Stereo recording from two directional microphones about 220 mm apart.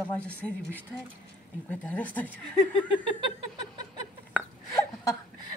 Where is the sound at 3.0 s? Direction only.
20° right (ahead or behind).